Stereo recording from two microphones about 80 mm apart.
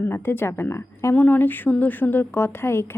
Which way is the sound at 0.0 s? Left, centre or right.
Left.